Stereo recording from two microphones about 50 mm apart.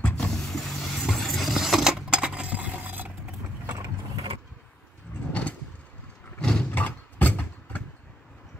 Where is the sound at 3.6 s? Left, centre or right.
Right.